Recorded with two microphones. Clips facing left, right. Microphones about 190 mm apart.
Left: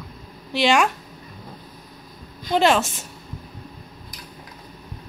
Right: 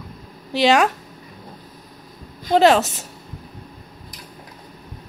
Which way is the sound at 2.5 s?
40° right (ahead or behind).